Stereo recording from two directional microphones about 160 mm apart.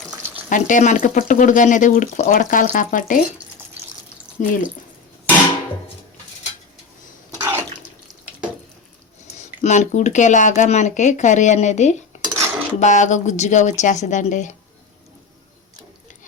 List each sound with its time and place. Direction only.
0.5 s speech: 50° left (ahead or behind)
4.4 s speech: 55° left (ahead or behind)
7.3 s bathtub: 20° right (ahead or behind)
9.6 s speech: 45° left (ahead or behind)
12.2 s dishes: 20° right (ahead or behind)
12.8 s speech: 50° left (ahead or behind)